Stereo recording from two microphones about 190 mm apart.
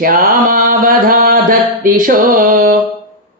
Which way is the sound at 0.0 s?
50° right (ahead or behind).